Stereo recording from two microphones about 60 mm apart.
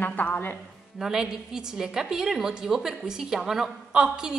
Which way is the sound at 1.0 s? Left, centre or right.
Centre.